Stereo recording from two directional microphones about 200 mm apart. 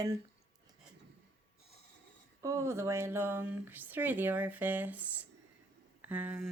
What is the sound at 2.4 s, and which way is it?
Speech, 15° right (ahead or behind).